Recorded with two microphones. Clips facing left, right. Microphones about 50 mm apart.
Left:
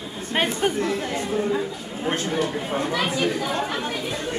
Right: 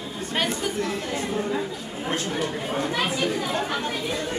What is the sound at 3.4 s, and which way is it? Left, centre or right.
Speech, centre.